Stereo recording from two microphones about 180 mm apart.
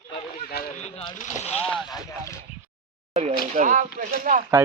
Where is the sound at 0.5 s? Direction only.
55° left (ahead or behind).